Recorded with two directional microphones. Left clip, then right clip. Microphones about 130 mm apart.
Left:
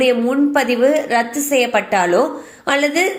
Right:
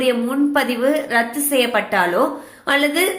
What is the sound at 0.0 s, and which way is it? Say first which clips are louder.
A woman's voice: left 3 dB; 35° left (ahead or behind).